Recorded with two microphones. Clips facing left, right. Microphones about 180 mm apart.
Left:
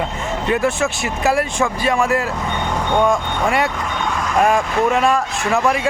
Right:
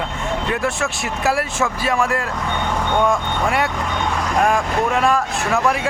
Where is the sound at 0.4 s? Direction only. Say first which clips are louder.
Left 6 dB; centre (ahead or behind).